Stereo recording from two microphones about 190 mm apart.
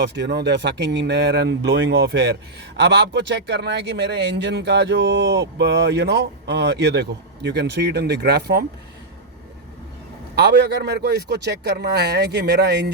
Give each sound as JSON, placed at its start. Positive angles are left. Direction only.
{"t": 0.0, "sound": "a man's voice", "side_deg": -60}
{"t": 10.3, "sound": "a man's voice", "side_deg": -60}